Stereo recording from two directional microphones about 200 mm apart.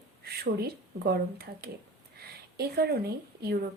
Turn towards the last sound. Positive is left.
turn(degrees=-50)  # may be behind; listen again after turning